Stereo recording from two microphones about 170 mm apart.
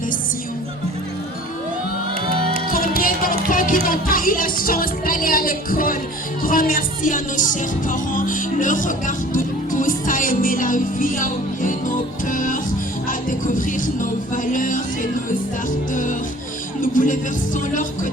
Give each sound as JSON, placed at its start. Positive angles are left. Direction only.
{"t": 2.2, "sound": "music", "side_deg": -30}
{"t": 3.0, "sound": "music", "side_deg": 55}
{"t": 16.8, "sound": "music", "side_deg": 50}